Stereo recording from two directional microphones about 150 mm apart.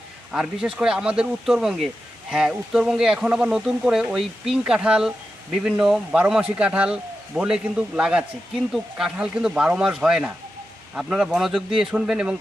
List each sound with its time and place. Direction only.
0.3 s a man's voice: 5° right (ahead or behind)